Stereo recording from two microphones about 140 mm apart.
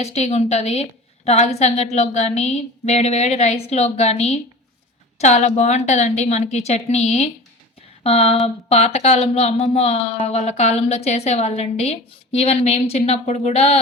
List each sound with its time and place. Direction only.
0.0 s a woman's voice: 50° left (ahead or behind)